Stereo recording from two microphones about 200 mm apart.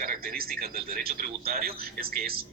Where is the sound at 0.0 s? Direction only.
45° right (ahead or behind).